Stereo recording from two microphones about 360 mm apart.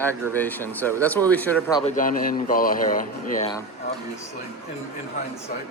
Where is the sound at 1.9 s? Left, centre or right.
Left.